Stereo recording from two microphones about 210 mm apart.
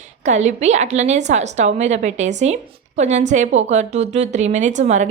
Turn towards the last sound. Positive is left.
turn(degrees=-35)  # may be behind; listen again after turning